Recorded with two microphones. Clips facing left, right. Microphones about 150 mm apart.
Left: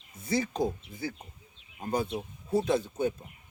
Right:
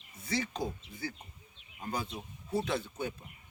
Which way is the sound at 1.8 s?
55° left (ahead or behind).